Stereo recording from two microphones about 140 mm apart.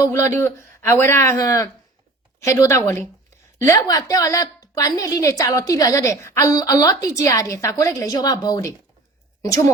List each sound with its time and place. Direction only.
0.0 s a woman's voice: 20° left (ahead or behind)